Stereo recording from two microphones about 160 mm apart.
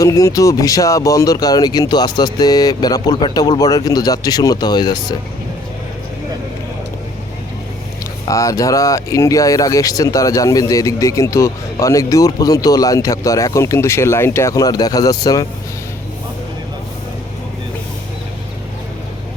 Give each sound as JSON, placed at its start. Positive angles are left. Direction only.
{"t": 0.0, "sound": "speech", "side_deg": 20}
{"t": 8.3, "sound": "speech", "side_deg": 20}